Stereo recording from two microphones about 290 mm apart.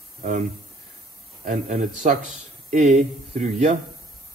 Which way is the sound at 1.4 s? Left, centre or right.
Right.